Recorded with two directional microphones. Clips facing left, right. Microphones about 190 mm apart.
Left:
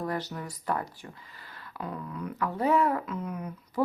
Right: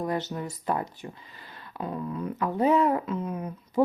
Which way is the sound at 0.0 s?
20° right (ahead or behind).